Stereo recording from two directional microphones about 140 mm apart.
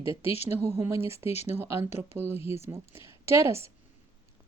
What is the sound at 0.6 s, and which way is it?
Speech, 20° right (ahead or behind).